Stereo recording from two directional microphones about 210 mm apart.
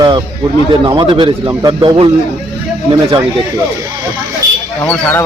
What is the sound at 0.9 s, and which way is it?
A man's voice, 20° right (ahead or behind).